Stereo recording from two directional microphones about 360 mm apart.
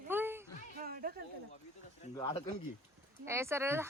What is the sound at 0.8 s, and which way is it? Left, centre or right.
Speech, right.